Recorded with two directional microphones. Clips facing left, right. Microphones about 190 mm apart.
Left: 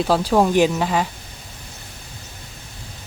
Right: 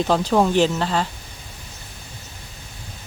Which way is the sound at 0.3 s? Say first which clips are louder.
Left 2 dB; 10° left (ahead or behind).